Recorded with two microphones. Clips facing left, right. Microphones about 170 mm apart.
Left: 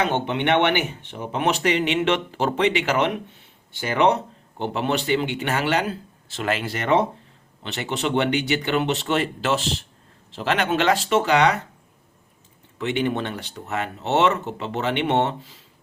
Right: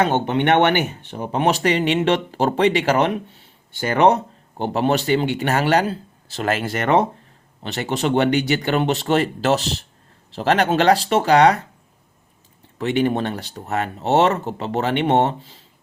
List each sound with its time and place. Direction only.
0.0 s speech: 45° right (ahead or behind)
7.6 s speech: 40° right (ahead or behind)
12.8 s speech: 40° right (ahead or behind)